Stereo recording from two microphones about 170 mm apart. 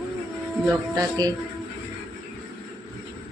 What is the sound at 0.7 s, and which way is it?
Speech, 20° right (ahead or behind).